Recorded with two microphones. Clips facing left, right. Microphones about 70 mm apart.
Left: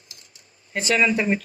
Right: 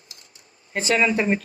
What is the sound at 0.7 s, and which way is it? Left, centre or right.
Speech, right.